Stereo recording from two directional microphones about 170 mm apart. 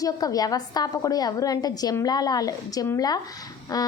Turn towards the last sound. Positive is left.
turn(degrees=20)  # may be behind; listen again after turning